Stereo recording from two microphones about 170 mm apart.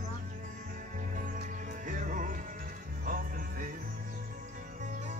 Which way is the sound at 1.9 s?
50° right (ahead or behind).